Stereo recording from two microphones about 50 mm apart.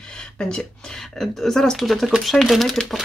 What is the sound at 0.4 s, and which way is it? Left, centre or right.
Speech, centre.